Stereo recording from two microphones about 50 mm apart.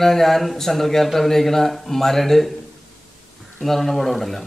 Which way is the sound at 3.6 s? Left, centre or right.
Centre.